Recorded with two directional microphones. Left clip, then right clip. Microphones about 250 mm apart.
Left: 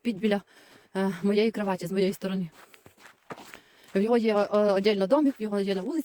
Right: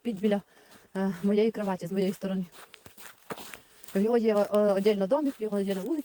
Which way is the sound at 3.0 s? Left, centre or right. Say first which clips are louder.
Right 2 dB; right.